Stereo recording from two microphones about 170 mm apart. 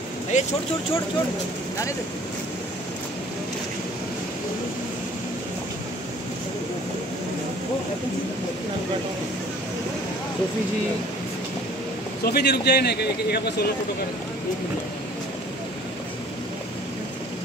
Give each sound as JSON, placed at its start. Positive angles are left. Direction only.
{"t": 0.3, "sound": "speech", "side_deg": 45}
{"t": 12.3, "sound": "a man's voice", "side_deg": 75}